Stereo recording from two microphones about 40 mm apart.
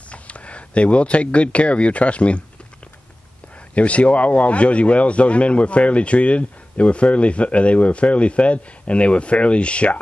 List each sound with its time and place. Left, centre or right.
0.1 s speech: left
3.7 s a man's voice: left